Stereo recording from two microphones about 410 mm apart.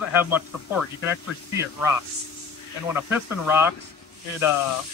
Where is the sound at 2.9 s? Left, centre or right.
Centre.